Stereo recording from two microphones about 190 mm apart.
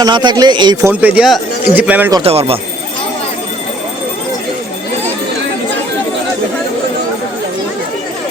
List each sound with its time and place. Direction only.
0.0 s a man's voice: 25° right (ahead or behind)
1.0 s speech: 5° right (ahead or behind)
2.2 s speech: 30° right (ahead or behind)